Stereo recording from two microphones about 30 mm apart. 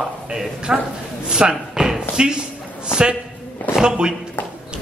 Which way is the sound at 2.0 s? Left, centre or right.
Right.